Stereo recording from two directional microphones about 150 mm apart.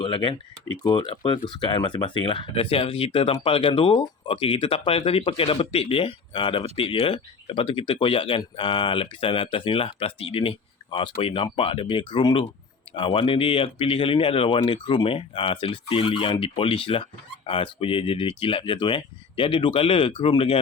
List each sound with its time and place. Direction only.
0.0 s speech: 35° left (ahead or behind)